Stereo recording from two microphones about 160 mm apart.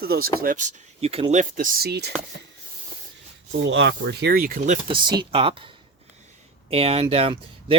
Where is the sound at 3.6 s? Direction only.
90° right; by 4.8 s 55° right (ahead or behind).